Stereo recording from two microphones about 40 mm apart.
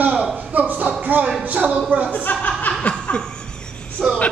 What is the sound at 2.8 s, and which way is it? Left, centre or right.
Laughter, left.